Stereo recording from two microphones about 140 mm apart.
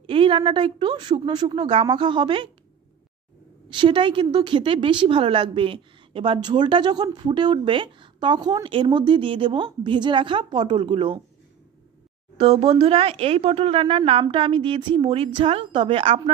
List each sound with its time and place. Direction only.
0.0 s a woman's voice: 40° right (ahead or behind)
3.7 s a woman's voice: 35° right (ahead or behind)
12.4 s a woman's voice: 45° right (ahead or behind)